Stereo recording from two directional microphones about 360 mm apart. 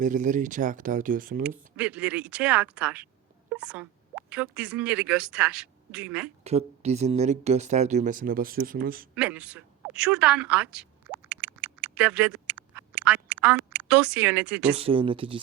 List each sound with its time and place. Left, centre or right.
0.0 s speech: right
1.5 s speech: centre
6.4 s speech: centre
9.1 s a sound: centre
14.8 s speech: centre